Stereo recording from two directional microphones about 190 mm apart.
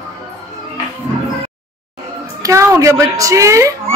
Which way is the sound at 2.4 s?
15° right (ahead or behind).